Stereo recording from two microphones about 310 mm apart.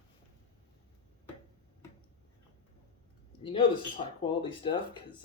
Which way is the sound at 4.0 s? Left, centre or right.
Centre.